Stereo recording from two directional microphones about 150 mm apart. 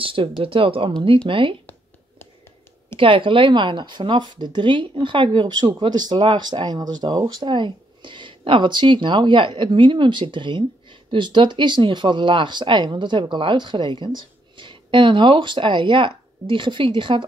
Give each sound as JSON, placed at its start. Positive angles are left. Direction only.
{"t": 0.0, "sound": "speech", "side_deg": -35}
{"t": 3.0, "sound": "speech", "side_deg": -35}